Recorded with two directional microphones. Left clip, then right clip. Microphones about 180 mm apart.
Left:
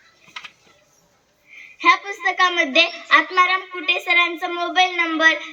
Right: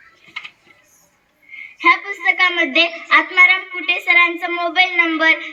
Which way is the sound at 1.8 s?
30° left (ahead or behind).